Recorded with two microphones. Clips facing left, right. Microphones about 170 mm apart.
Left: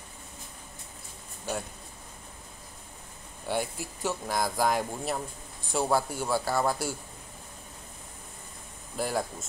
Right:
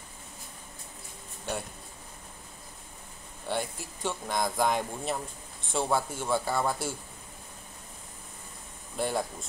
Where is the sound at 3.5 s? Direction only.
10° left (ahead or behind).